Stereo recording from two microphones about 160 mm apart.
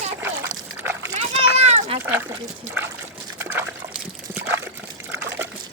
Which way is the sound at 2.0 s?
10° right (ahead or behind).